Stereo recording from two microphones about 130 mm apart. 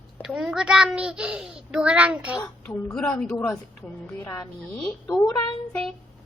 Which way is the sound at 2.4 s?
15° left (ahead or behind).